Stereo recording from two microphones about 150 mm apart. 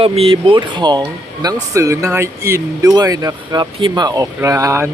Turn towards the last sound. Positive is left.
turn(degrees=-20)  # may be behind; listen again after turning